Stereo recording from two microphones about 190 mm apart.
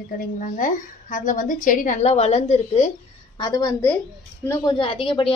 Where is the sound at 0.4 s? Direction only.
45° left (ahead or behind).